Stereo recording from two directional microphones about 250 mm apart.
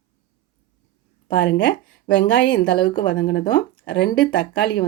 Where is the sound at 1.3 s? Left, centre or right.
Left.